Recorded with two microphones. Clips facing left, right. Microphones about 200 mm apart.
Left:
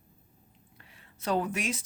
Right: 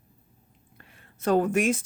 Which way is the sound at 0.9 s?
50° right (ahead or behind).